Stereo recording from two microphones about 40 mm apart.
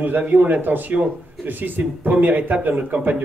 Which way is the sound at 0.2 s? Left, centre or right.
Right.